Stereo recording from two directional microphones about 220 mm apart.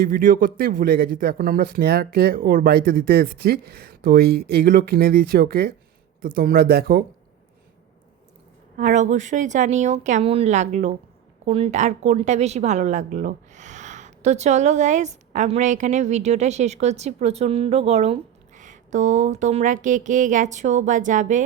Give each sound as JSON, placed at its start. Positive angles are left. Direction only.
{"t": 0.0, "sound": "speech", "side_deg": -40}
{"t": 8.8, "sound": "speech", "side_deg": -35}